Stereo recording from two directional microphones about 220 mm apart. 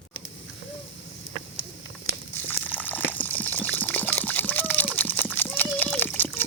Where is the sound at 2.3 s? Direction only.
10° left (ahead or behind).